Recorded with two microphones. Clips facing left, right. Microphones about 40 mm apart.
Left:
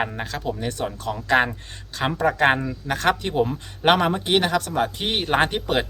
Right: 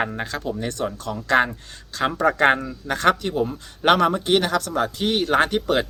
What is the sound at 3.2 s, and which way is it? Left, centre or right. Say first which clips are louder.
Speech: left 1 dB; left.